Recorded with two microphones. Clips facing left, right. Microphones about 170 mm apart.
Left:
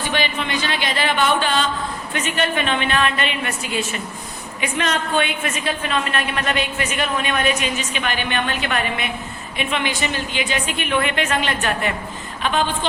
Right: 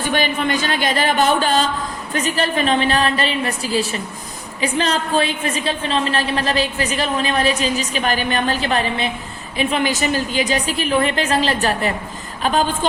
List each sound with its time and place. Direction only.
0.0 s a woman's voice: 45° right (ahead or behind)